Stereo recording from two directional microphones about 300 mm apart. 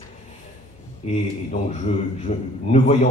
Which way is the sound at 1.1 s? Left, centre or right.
Left.